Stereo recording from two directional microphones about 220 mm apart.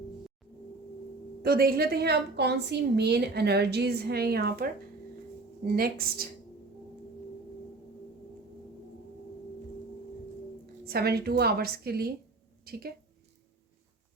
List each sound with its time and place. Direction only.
1.4 s a woman's voice: 45° right (ahead or behind)
10.8 s a woman's voice: 45° right (ahead or behind)